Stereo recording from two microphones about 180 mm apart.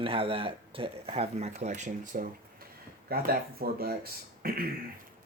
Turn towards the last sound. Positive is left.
turn(degrees=-55)  # may be behind; listen again after turning